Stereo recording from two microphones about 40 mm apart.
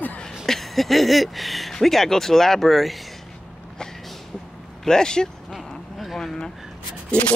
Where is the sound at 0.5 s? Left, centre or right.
Centre.